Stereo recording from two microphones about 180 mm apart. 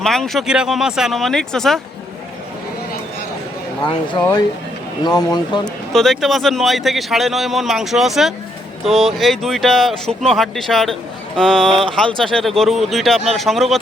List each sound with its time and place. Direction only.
0.0 s speech: centre (ahead or behind)
4.1 s speech: 25° left (ahead or behind)
5.6 s speech: centre (ahead or behind)